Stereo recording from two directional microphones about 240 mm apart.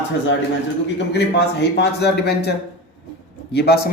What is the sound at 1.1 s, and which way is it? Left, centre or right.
A man's voice, left.